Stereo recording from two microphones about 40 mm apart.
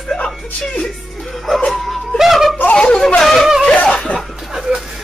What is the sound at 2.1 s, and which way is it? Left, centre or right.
Yodeling, centre.